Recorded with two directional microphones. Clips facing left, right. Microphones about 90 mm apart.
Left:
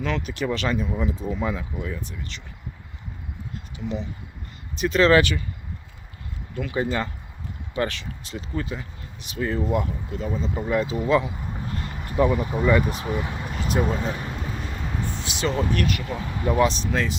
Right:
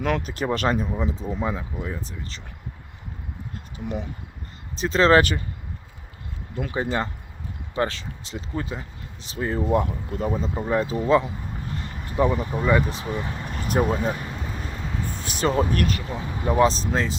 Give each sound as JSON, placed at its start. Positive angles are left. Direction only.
{"t": 0.2, "sound": "speech", "side_deg": -35}
{"t": 0.9, "sound": "speech", "side_deg": -25}
{"t": 3.8, "sound": "speech", "side_deg": -50}
{"t": 4.8, "sound": "speech", "side_deg": -30}
{"t": 6.7, "sound": "speech", "side_deg": -30}
{"t": 10.7, "sound": "speech", "side_deg": -35}
{"t": 12.0, "sound": "speech", "side_deg": -20}
{"t": 12.4, "sound": "speech", "side_deg": 15}
{"t": 13.8, "sound": "speech", "side_deg": -10}
{"t": 14.3, "sound": "vehicle", "side_deg": 0}
{"t": 15.2, "sound": "speech", "side_deg": -45}